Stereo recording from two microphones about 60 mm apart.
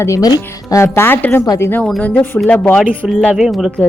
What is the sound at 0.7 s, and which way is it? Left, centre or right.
Speech, left.